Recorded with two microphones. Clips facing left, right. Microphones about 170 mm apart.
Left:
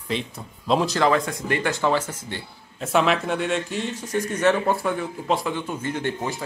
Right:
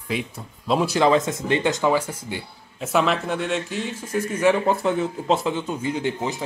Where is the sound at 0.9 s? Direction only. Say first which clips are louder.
Right 2 dB; 20° right (ahead or behind).